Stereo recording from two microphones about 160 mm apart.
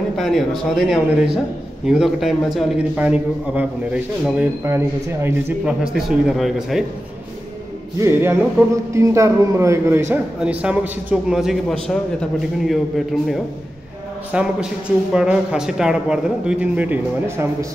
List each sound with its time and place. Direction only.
0.1 s a man's voice: centre (ahead or behind); by 5.8 s 15° right (ahead or behind)
5.9 s speech: centre (ahead or behind)
8.0 s a man's voice: 15° right (ahead or behind)